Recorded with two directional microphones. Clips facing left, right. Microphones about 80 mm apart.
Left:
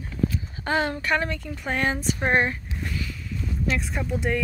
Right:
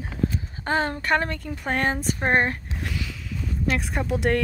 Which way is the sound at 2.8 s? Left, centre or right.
Right.